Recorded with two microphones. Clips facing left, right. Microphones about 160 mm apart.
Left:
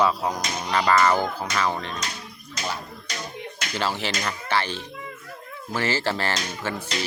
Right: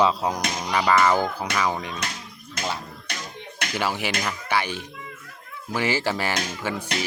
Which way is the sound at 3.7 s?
10° right (ahead or behind).